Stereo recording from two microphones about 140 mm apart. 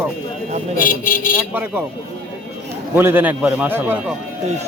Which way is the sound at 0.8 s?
80° left.